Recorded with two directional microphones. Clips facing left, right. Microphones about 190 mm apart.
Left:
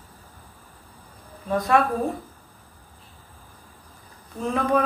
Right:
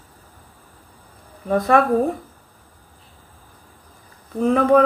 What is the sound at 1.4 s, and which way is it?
Speech, 55° right (ahead or behind).